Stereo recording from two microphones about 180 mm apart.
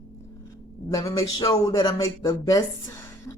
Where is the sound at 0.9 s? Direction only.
20° left (ahead or behind).